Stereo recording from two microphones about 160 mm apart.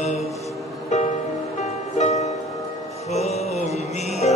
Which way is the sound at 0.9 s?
50° left (ahead or behind).